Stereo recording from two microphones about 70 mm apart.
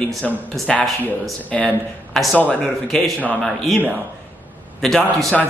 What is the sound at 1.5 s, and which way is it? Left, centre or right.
Speech, centre.